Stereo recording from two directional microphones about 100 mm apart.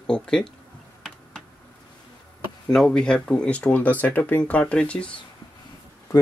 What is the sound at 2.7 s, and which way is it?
Speech, 5° left (ahead or behind).